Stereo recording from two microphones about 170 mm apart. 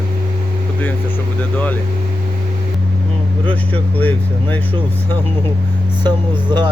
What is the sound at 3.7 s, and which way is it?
Speech, 10° left (ahead or behind).